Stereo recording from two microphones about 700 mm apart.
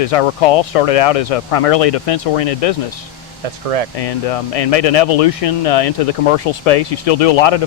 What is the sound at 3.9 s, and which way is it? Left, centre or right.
Speech, left.